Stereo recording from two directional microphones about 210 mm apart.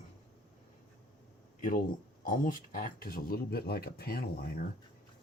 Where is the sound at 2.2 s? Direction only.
40° left (ahead or behind).